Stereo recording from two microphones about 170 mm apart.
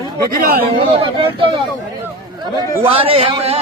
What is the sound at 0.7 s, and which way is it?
Speech, 30° right (ahead or behind).